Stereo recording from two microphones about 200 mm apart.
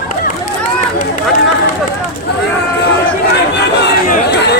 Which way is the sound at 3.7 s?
55° left (ahead or behind).